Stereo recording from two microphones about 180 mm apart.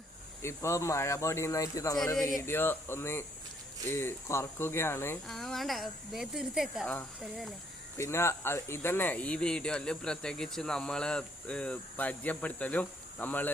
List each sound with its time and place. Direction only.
0.4 s speech: 15° left (ahead or behind)
5.3 s speech: centre (ahead or behind)
7.9 s speech: 15° left (ahead or behind)